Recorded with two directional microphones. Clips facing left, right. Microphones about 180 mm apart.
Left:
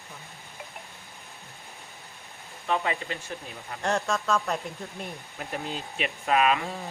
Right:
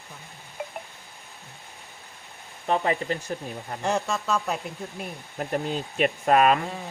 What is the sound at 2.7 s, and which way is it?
Speech, 35° right (ahead or behind).